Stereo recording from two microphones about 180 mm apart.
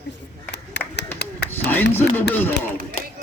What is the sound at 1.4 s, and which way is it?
A man's voice, 10° left (ahead or behind).